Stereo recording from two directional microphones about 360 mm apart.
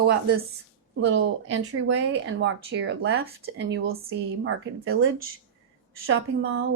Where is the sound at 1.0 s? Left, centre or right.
Right.